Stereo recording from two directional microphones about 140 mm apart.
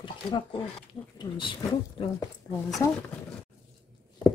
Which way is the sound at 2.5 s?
20° left (ahead or behind).